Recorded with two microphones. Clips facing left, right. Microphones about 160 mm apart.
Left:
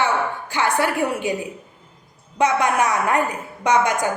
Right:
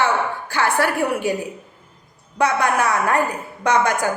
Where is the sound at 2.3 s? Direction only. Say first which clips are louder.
Even; 20° left (ahead or behind).